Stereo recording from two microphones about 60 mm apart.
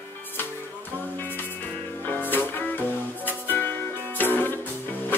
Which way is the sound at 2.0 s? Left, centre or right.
Left.